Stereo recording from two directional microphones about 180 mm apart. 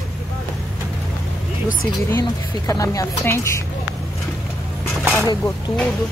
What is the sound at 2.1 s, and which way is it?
A woman's voice, 15° left (ahead or behind).